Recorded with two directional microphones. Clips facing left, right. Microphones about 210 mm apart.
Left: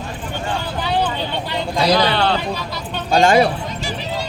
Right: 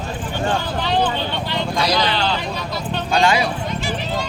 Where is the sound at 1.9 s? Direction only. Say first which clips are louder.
Left 3 dB; 55° left (ahead or behind).